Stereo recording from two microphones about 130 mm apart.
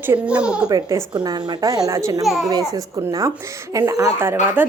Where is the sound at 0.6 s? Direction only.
25° right (ahead or behind).